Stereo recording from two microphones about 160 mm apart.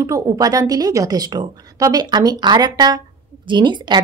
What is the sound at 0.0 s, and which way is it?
Speech, 20° right (ahead or behind).